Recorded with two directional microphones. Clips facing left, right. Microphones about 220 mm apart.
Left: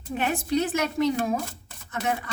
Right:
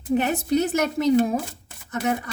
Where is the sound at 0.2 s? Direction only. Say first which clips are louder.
Left 1 dB; 40° right (ahead or behind).